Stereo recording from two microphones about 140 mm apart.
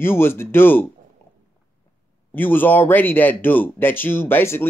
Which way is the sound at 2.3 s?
15° left (ahead or behind).